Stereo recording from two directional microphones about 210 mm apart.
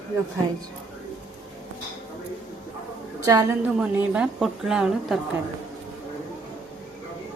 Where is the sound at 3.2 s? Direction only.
15° right (ahead or behind).